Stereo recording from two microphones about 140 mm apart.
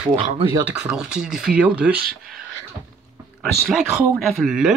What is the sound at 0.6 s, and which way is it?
Speech, 5° right (ahead or behind).